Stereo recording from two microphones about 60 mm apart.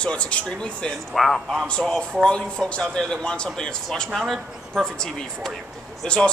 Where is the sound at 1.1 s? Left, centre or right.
Centre.